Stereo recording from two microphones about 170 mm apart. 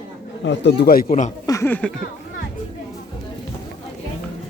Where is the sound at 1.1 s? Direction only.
40° left (ahead or behind).